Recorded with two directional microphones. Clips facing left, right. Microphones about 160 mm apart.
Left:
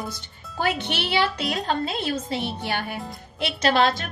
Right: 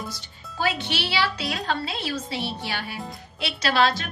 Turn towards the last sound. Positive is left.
turn(degrees=50)  # may be behind; listen again after turning